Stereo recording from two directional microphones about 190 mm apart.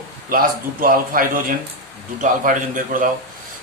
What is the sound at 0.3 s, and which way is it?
Speech, 50° right (ahead or behind).